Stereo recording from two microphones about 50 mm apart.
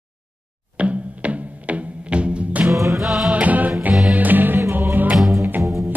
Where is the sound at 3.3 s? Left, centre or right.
Right.